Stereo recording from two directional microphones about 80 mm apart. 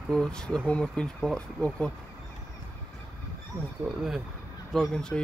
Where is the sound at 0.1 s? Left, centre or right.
Centre.